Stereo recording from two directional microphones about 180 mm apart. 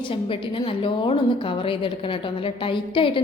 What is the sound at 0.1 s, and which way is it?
A woman's voice, 30° left (ahead or behind).